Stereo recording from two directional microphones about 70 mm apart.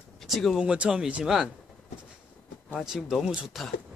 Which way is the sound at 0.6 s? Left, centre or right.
Centre.